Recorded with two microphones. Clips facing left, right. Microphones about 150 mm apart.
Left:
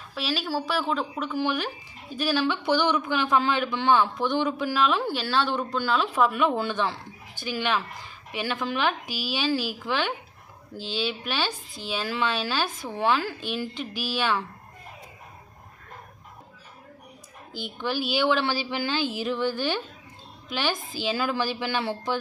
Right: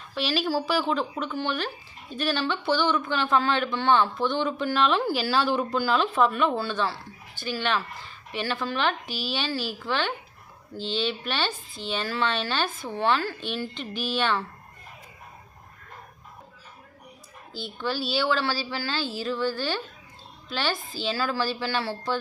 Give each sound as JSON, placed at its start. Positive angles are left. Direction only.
{"t": 0.1, "sound": "speech", "side_deg": 0}
{"t": 17.5, "sound": "speech", "side_deg": 15}